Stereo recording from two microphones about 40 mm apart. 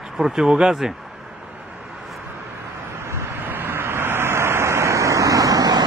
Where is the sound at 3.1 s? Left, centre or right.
Right.